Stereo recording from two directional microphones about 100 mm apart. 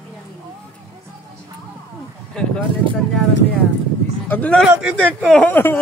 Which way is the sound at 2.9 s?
5° left (ahead or behind).